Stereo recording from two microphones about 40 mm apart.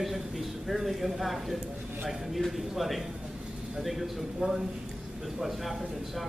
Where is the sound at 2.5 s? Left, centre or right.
Centre.